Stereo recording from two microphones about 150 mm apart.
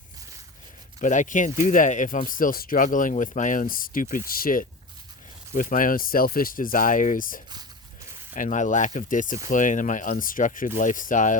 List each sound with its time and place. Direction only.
1.0 s speech: 55° left (ahead or behind); by 4.6 s 75° left (ahead or behind)
5.5 s speech: 60° left (ahead or behind)